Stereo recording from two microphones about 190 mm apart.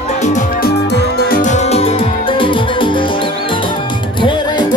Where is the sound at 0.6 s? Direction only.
50° left (ahead or behind); by 3.1 s 25° left (ahead or behind).